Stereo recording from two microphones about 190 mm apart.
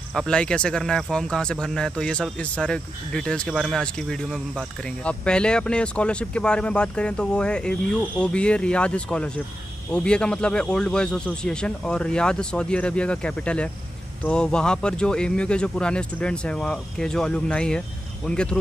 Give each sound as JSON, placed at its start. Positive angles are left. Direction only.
{"t": 0.1, "sound": "speech", "side_deg": 5}